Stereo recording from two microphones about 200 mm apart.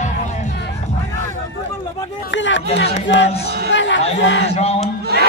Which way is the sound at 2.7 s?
65° left (ahead or behind).